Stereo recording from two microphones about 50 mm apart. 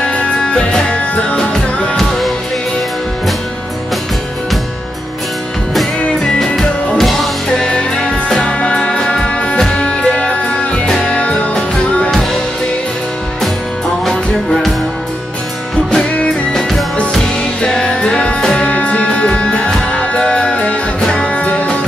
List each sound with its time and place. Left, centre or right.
0.1 s music: centre
2.0 s music: centre
6.4 s music: centre
8.5 s music: left
14.0 s music: centre
16.5 s music: centre
16.9 s music: centre